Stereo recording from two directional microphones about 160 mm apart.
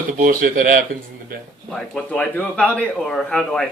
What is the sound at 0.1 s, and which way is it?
Speech, 55° right (ahead or behind).